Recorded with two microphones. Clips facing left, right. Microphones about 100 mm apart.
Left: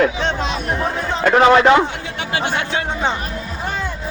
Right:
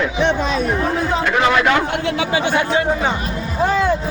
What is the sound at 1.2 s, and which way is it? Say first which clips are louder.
Speech: left 7 dB; 40° left (ahead or behind).